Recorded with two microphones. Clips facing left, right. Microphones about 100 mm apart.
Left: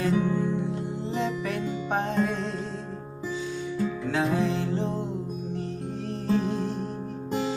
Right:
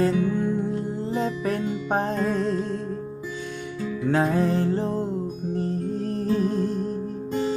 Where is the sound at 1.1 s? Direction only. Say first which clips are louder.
Right 3 dB; 40° right (ahead or behind).